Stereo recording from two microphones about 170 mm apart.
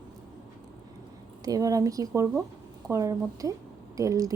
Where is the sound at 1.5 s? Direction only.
20° right (ahead or behind).